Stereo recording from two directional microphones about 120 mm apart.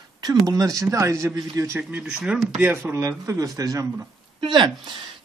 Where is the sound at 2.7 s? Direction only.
20° right (ahead or behind).